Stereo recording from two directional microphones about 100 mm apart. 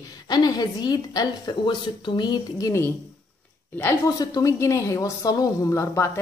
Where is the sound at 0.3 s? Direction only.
40° left (ahead or behind).